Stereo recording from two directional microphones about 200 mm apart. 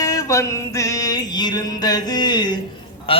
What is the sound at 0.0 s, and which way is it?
Music, 15° left (ahead or behind).